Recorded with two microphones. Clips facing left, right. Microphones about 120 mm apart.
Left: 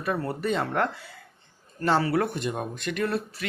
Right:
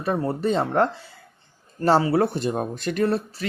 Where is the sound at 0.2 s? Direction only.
30° right (ahead or behind).